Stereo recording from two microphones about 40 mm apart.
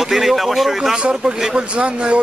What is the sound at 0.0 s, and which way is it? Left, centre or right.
Speech, centre.